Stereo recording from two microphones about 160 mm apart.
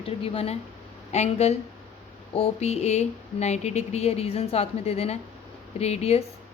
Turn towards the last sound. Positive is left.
turn(degrees=40)  # may be behind; listen again after turning